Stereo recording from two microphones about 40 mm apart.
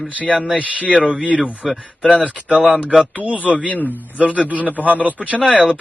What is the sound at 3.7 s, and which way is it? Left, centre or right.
Speech, left.